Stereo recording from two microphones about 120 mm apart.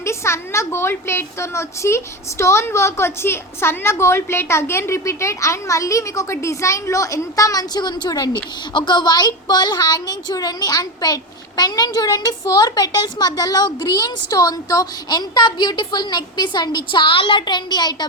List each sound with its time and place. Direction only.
0.0 s a woman's voice: 20° left (ahead or behind)